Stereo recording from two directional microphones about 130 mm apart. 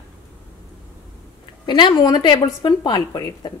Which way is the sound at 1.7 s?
35° left (ahead or behind).